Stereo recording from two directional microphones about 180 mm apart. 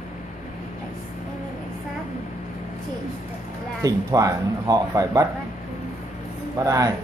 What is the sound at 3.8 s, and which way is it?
Speech, 20° right (ahead or behind).